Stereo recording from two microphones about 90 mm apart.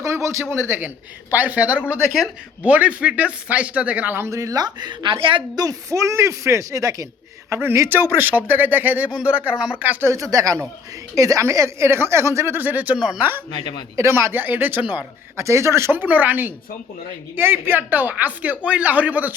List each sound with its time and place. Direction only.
0.0 s a sound: 35° right (ahead or behind)
0.5 s speech: 25° right (ahead or behind)
4.3 s speech: 35° right (ahead or behind); by 5.1 s 55° right (ahead or behind)
5.5 s speech: 40° right (ahead or behind); by 10.1 s 20° right (ahead or behind)
10.1 s speech: 40° right (ahead or behind); by 13.2 s 15° right (ahead or behind)
13.5 s speech: 60° left (ahead or behind)
13.9 s speech: 30° right (ahead or behind)
15.4 s speech: 35° right (ahead or behind); by 19.3 s 15° right (ahead or behind)